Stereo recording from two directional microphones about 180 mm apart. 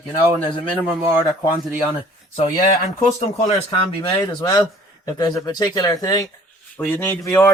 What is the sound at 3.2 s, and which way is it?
Speech, 35° left (ahead or behind).